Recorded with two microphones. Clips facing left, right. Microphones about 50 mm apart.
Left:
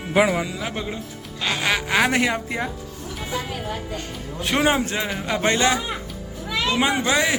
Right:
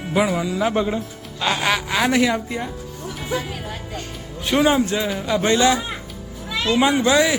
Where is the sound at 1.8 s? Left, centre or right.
Left.